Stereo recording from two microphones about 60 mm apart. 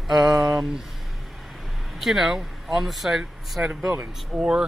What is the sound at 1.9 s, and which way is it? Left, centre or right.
Speech, centre.